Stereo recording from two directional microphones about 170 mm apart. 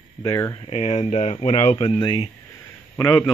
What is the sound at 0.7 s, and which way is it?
Speech, 40° left (ahead or behind).